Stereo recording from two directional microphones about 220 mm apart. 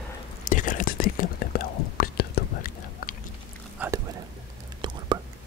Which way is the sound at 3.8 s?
5° right (ahead or behind).